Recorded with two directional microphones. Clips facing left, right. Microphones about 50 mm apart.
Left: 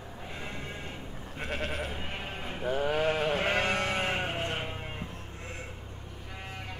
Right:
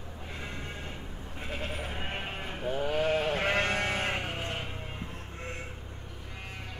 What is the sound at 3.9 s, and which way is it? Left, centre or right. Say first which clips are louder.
Sheep: left 2 dB; left.